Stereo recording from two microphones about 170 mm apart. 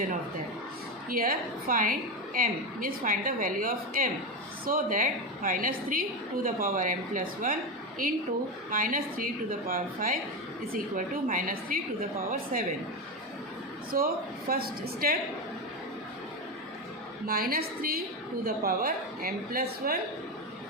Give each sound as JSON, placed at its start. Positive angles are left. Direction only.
{"t": 1.1, "sound": "a woman's voice", "side_deg": -55}
{"t": 13.9, "sound": "a woman's voice", "side_deg": -60}
{"t": 17.2, "sound": "a woman's voice", "side_deg": -60}